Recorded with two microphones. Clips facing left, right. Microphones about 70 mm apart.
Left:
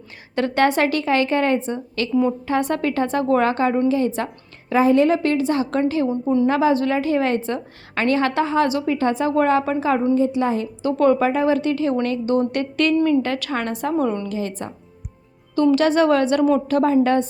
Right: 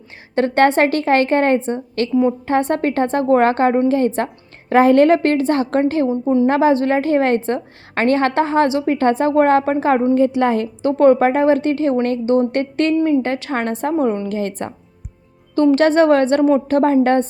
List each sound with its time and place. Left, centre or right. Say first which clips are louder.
0.3 s a woman's voice: right 4 dB; right
4.7 s a woman's voice: right 5 dB; right
10.2 s a woman's voice: right 4 dB; right
10.8 s a woman's voice: right 5 dB; right
14.3 s a woman's voice: right 4 dB; right